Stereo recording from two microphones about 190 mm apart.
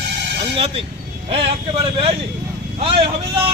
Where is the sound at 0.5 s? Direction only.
30° right (ahead or behind).